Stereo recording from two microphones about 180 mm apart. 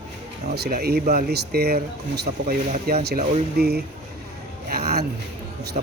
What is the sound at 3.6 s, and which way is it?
Speech, 60° right (ahead or behind).